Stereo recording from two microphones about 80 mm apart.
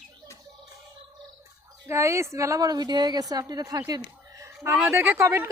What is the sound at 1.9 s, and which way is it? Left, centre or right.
A woman's voice, right.